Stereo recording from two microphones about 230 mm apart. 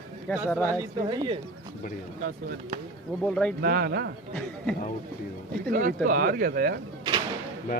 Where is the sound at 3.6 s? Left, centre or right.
Right.